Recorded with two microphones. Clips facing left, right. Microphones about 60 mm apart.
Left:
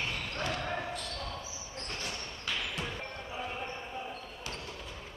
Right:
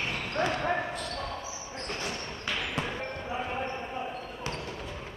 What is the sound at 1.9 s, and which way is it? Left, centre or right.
Basketball bounce, right.